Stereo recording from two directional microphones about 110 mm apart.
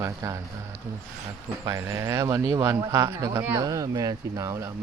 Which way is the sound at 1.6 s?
25° right (ahead or behind).